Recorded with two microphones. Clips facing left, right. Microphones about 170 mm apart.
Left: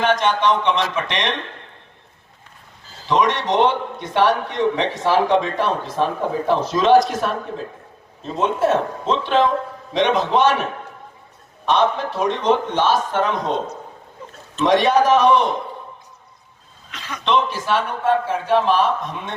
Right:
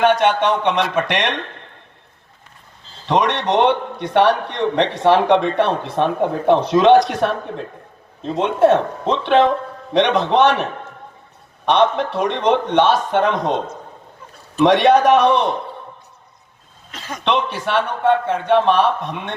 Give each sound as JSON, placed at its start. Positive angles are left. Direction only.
{"t": 0.0, "sound": "a man's voice", "side_deg": -60}
{"t": 3.1, "sound": "a man's voice", "side_deg": -65}
{"t": 9.0, "sound": "a man's voice", "side_deg": -65}
{"t": 16.9, "sound": "a man's voice", "side_deg": -45}
{"t": 17.2, "sound": "a man's voice", "side_deg": -65}